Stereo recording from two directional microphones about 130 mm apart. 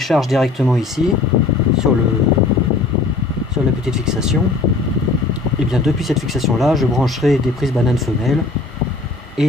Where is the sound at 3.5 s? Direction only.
5° right (ahead or behind).